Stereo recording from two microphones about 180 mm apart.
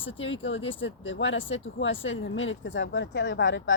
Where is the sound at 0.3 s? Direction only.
90° left.